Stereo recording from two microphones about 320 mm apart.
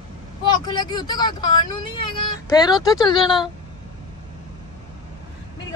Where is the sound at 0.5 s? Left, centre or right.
Centre.